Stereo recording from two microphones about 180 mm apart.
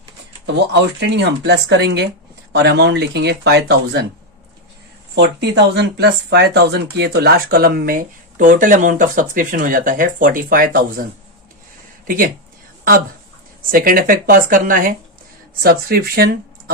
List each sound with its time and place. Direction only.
0.4 s speech: 75° right (ahead or behind)
5.1 s speech: 75° right (ahead or behind); by 11.0 s 55° right (ahead or behind)
12.0 s speech: 50° right (ahead or behind)
13.6 s speech: 50° right (ahead or behind)